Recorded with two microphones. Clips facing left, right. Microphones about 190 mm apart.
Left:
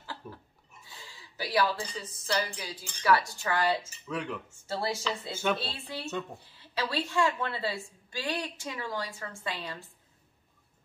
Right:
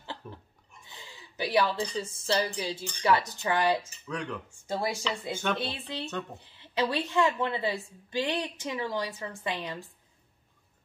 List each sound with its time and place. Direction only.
0.0 s pig: 25° right (ahead or behind)
0.8 s a woman's voice: 20° right (ahead or behind)
4.1 s speech: 5° left (ahead or behind)
4.6 s chopping: 15° right (ahead or behind)
5.3 s speech: 5° left (ahead or behind)
5.6 s a woman's voice: 20° right (ahead or behind)